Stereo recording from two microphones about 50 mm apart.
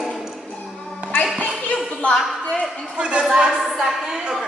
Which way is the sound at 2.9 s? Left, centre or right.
Centre.